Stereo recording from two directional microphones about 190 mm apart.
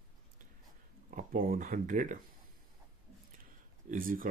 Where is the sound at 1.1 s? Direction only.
50° right (ahead or behind).